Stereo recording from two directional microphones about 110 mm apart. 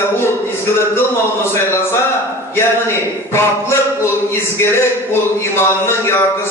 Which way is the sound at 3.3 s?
25° left (ahead or behind).